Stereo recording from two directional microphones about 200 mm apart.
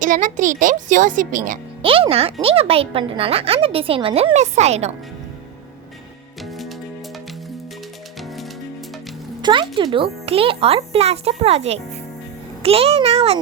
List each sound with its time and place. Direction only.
0.0 s speech: 40° right (ahead or behind)
1.8 s a woman's voice: 25° right (ahead or behind)
6.4 s music: centre (ahead or behind)
9.4 s a woman's voice: 25° right (ahead or behind)